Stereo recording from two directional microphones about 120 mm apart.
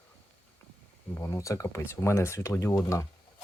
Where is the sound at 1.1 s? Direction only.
25° left (ahead or behind).